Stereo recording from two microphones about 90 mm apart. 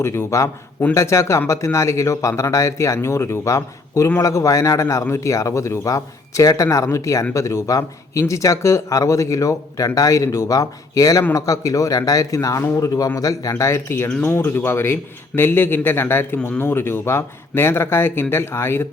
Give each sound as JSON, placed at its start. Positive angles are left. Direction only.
{"t": 0.0, "sound": "speech", "side_deg": 30}